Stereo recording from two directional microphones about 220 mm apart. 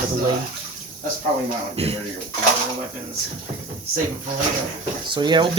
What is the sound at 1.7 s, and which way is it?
Speech, 25° right (ahead or behind).